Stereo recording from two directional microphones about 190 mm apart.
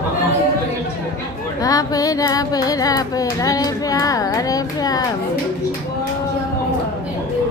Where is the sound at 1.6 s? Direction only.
20° left (ahead or behind).